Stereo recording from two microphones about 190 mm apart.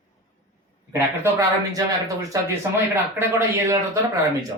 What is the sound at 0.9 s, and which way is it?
Speech, 15° right (ahead or behind).